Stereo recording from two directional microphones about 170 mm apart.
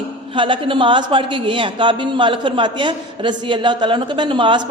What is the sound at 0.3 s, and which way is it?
Speech, 30° right (ahead or behind).